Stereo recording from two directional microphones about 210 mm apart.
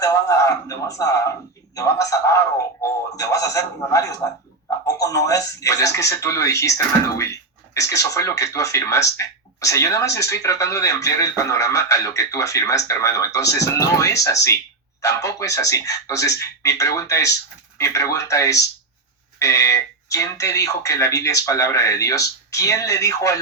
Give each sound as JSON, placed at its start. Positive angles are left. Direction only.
{"t": 0.0, "sound": "a man's voice", "side_deg": 15}